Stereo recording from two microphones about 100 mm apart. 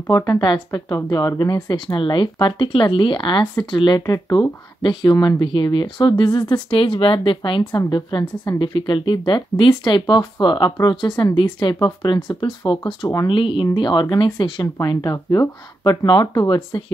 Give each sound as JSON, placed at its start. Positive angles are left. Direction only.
{"t": 0.1, "sound": "speech", "side_deg": 35}
{"t": 0.4, "sound": "speech", "side_deg": 45}
{"t": 4.0, "sound": "speech", "side_deg": 40}
{"t": 7.7, "sound": "speech", "side_deg": 45}